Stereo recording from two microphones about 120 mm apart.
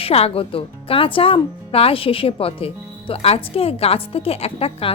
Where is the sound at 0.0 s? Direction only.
55° left (ahead or behind).